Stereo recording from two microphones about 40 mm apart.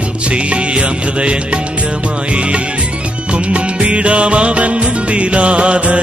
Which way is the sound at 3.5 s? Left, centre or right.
Right.